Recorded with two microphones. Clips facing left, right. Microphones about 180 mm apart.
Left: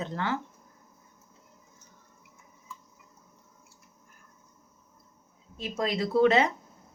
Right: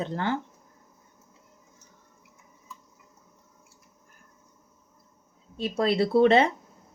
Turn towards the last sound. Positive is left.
turn(degrees=-30)  # may be behind; listen again after turning